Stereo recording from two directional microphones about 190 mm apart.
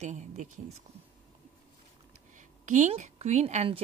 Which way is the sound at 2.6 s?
40° right (ahead or behind).